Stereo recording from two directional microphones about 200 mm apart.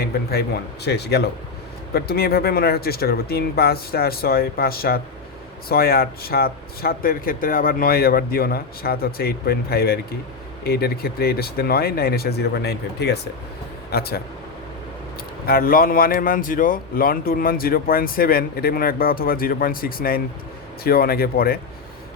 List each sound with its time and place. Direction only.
0.0 s speech: 50° left (ahead or behind)
15.4 s speech: 50° left (ahead or behind)